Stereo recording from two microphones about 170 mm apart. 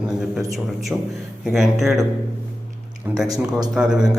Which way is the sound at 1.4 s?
Centre (ahead or behind).